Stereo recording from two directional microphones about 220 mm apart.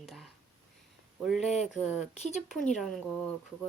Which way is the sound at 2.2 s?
30° left (ahead or behind).